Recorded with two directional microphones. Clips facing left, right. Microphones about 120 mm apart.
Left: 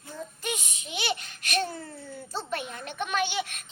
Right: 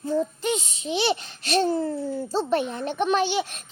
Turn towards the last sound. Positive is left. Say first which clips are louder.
# right 5 dB
turn(degrees=-35)  # may be behind; listen again after turning